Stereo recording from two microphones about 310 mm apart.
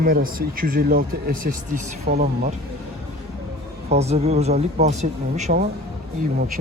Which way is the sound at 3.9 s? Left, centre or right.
Right.